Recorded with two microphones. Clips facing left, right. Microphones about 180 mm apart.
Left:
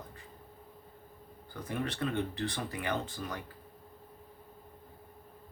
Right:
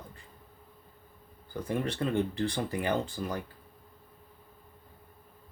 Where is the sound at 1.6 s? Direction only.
30° right (ahead or behind).